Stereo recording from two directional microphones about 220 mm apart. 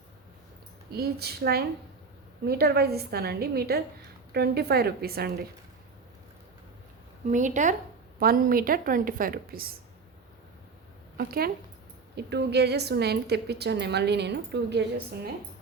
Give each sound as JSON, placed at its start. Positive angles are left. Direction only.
{"t": 0.9, "sound": "a woman's voice", "side_deg": -45}
{"t": 7.3, "sound": "a woman's voice", "side_deg": -35}
{"t": 11.2, "sound": "a woman's voice", "side_deg": -45}